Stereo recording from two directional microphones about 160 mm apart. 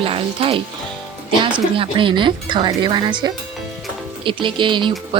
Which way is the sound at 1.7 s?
30° right (ahead or behind).